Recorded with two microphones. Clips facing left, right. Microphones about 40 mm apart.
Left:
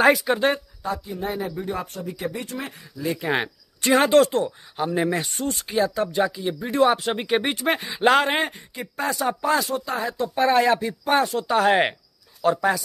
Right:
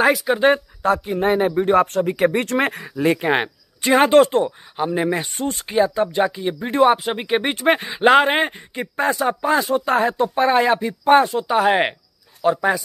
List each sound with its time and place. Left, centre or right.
0.0 s speech: centre
0.8 s speech: right
2.4 s speech: right
3.2 s speech: right
4.7 s speech: centre
6.9 s speech: centre
9.8 s speech: right
10.3 s speech: right